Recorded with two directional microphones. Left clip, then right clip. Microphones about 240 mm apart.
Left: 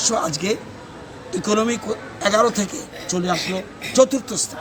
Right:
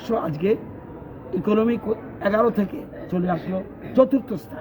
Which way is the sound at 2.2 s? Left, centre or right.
Centre.